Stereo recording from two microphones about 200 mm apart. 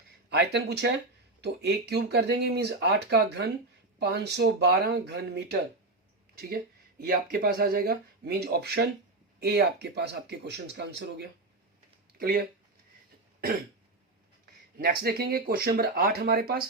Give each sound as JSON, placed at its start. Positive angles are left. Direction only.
{"t": 0.3, "sound": "speech", "side_deg": -55}
{"t": 14.8, "sound": "speech", "side_deg": -50}